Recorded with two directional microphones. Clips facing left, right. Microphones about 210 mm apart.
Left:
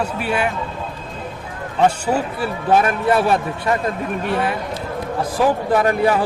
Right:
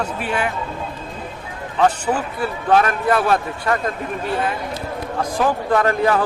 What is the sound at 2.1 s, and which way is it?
Speech, 15° left (ahead or behind).